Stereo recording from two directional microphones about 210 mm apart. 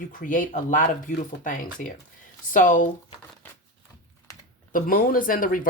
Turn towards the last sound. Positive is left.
turn(degrees=40)  # may be behind; listen again after turning